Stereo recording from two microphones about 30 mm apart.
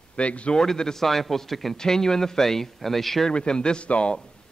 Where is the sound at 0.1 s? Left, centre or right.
Left.